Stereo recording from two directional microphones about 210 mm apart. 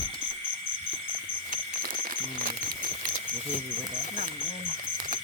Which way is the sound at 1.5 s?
40° right (ahead or behind).